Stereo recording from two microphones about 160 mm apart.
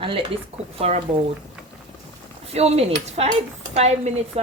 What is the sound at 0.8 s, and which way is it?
Speech, 40° right (ahead or behind).